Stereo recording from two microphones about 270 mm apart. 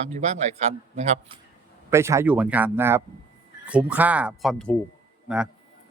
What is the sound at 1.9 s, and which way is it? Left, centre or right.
Speech, centre.